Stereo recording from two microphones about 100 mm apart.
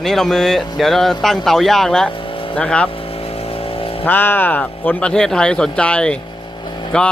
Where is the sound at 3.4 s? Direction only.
70° left (ahead or behind).